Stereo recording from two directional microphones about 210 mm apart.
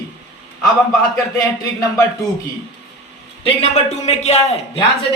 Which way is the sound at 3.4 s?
30° left (ahead or behind).